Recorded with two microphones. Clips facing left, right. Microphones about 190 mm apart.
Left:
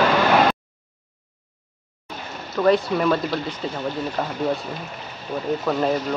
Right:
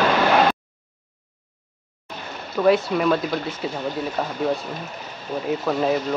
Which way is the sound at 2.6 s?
5° right (ahead or behind).